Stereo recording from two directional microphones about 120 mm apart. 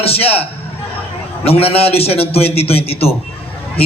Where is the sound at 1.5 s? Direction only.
55° left (ahead or behind).